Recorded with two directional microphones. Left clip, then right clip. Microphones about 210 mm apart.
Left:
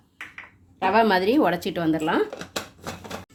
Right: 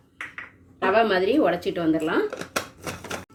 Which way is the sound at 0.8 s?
60° left (ahead or behind).